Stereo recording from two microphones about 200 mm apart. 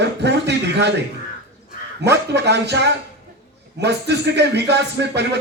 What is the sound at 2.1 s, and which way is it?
Speech, 60° right (ahead or behind).